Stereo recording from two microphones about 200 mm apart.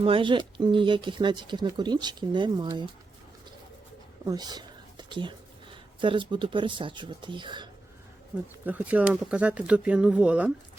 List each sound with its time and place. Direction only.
0.0 s speech: 25° right (ahead or behind)
4.3 s a sound: 20° right (ahead or behind)
6.0 s speech: 25° right (ahead or behind)
8.6 s speech: 5° right (ahead or behind)